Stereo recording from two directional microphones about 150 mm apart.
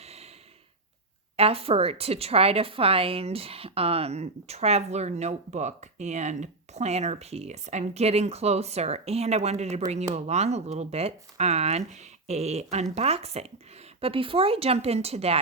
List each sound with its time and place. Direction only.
0.0 s snort: 45° right (ahead or behind)
1.4 s a woman's voice: 40° right (ahead or behind)